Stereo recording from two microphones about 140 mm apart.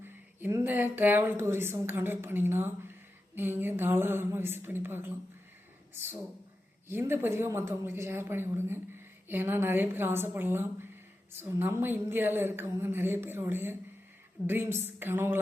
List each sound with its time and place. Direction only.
0.3 s speech: 15° right (ahead or behind)